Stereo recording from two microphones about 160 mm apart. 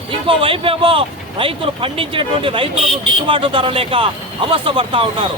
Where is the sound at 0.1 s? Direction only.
35° right (ahead or behind).